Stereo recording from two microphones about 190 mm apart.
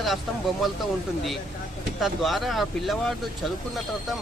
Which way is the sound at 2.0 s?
Centre (ahead or behind).